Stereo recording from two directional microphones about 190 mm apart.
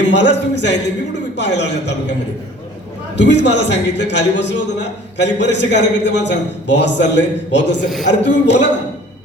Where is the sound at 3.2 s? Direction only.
65° left (ahead or behind).